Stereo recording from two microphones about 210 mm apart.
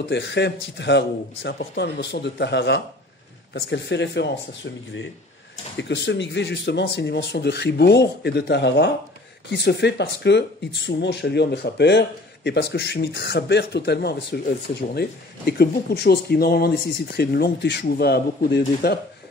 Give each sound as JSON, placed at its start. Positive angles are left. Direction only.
{"t": 0.1, "sound": "a man's voice", "side_deg": 55}
{"t": 5.8, "sound": "speech", "side_deg": 55}